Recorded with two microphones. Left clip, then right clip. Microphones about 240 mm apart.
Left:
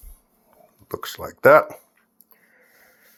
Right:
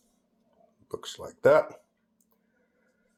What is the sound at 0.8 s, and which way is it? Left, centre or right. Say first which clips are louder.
Speech: left 7 dB; centre.